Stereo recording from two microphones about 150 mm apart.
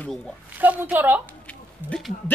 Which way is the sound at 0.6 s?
10° right (ahead or behind).